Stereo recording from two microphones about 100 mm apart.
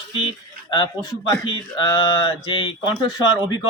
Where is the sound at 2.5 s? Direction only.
55° left (ahead or behind).